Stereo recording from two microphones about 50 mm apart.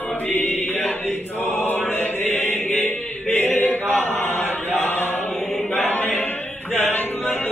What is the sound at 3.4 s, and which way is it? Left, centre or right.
Chant, left.